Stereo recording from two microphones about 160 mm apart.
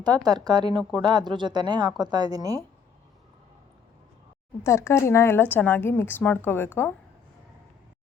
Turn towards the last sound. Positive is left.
turn(degrees=15)  # may be behind; listen again after turning